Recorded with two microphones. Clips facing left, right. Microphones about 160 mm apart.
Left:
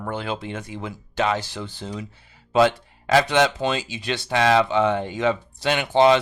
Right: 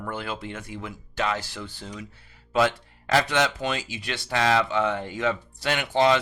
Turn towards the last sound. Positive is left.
turn(degrees=25)  # may be behind; listen again after turning